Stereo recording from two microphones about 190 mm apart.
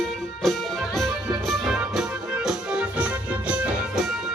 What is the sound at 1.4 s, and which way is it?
Music, centre (ahead or behind).